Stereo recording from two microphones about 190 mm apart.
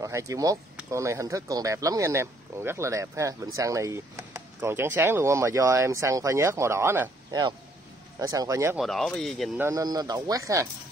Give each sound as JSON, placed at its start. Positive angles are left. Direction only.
{"t": 0.0, "sound": "speech", "side_deg": -15}
{"t": 8.7, "sound": "speech", "side_deg": 0}
{"t": 9.6, "sound": "speech", "side_deg": -15}